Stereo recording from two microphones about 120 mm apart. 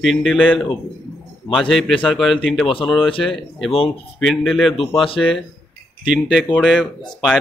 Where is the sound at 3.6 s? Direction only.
50° left (ahead or behind).